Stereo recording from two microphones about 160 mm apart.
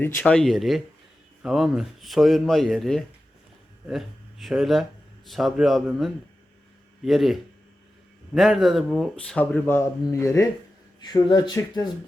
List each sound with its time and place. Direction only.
0.0 s speech: 10° left (ahead or behind)
8.4 s speech: centre (ahead or behind); by 11.9 s 25° left (ahead or behind)